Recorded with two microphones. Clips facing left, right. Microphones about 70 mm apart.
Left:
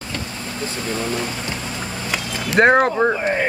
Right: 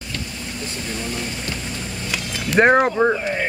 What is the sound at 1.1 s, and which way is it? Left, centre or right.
Speech, left.